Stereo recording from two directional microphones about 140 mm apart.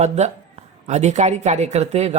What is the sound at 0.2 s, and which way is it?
Speech, 55° right (ahead or behind).